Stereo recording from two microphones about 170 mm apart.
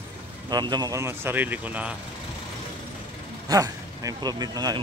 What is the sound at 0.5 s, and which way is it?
Speech, 25° right (ahead or behind).